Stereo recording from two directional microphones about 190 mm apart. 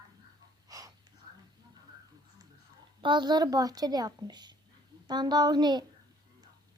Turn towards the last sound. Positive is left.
turn(degrees=-20)  # may be behind; listen again after turning